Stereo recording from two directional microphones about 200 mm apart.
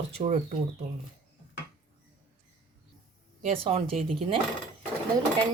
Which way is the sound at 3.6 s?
30° right (ahead or behind).